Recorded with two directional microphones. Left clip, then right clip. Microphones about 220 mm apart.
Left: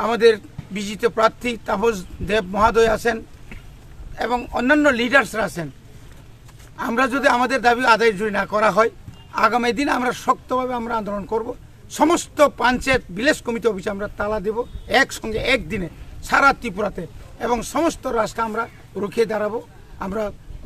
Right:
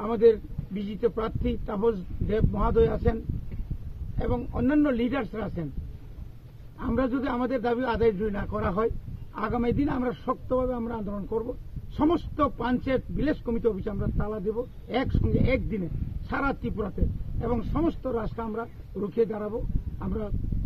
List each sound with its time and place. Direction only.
0.0 s a man's voice: 15° left (ahead or behind)
4.6 s a man's voice: 15° left (ahead or behind)
6.8 s a man's voice: 20° left (ahead or behind)
14.9 s a man's voice: 10° left (ahead or behind)